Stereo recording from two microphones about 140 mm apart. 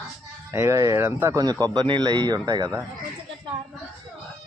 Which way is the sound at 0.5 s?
20° right (ahead or behind).